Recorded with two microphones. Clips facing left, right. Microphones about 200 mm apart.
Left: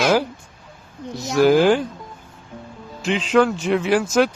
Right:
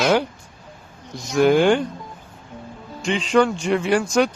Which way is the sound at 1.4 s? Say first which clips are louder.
Left 1 dB; centre (ahead or behind).